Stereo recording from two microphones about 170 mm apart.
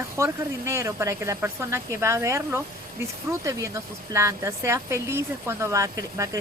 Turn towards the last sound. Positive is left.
turn(degrees=-20)  # may be behind; listen again after turning